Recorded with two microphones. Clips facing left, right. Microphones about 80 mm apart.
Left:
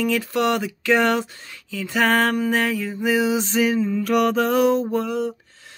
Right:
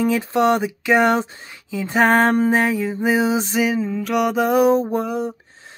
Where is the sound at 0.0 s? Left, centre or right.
Right.